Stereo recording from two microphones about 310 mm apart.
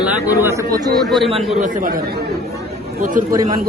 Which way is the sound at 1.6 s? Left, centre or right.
Right.